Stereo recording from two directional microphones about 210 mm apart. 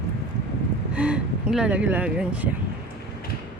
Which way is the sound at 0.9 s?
5° right (ahead or behind).